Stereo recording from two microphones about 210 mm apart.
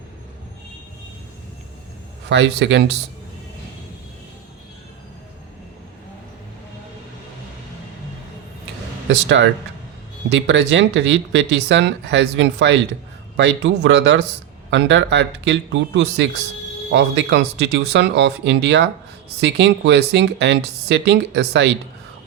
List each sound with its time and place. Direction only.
2.3 s speech: 55° right (ahead or behind)
9.0 s speech: 60° right (ahead or behind)